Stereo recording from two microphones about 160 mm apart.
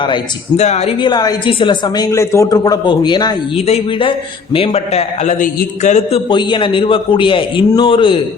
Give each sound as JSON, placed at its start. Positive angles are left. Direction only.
{"t": 0.5, "sound": "a woman's voice", "side_deg": 45}